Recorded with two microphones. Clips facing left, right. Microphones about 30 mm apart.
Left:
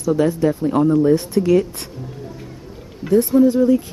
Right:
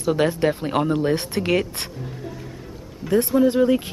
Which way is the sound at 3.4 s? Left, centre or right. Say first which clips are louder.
Left 2 dB; right.